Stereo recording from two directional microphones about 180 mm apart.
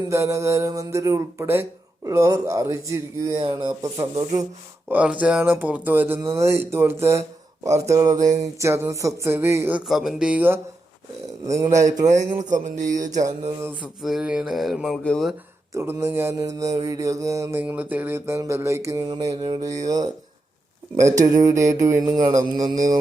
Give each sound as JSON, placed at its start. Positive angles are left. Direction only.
{"t": 0.1, "sound": "mantra", "side_deg": -15}
{"t": 4.1, "sound": "speech", "side_deg": -35}
{"t": 4.9, "sound": "mantra", "side_deg": -10}
{"t": 12.0, "sound": "speech", "side_deg": -40}
{"t": 13.8, "sound": "speech", "side_deg": 0}
{"t": 15.7, "sound": "mantra", "side_deg": -15}
{"t": 21.2, "sound": "mantra", "side_deg": -20}